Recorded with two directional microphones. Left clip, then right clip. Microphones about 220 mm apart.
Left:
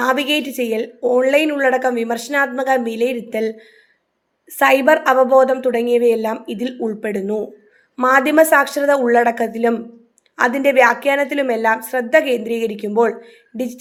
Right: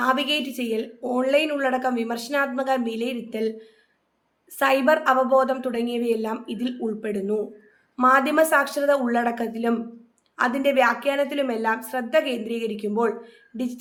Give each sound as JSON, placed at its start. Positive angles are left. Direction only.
{"t": 0.0, "sound": "a woman's voice", "side_deg": 25}